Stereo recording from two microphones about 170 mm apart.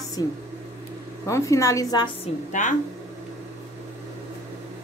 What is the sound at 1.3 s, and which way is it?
Speech, 20° left (ahead or behind).